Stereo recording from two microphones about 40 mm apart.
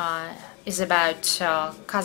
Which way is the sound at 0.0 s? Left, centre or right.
Centre.